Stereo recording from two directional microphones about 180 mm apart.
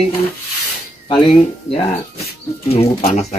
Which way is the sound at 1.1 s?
30° left (ahead or behind).